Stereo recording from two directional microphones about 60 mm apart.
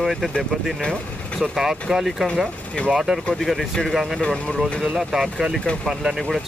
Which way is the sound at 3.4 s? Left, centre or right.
Centre.